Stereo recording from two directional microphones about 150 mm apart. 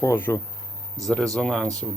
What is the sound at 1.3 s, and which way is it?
Speech, 5° left (ahead or behind).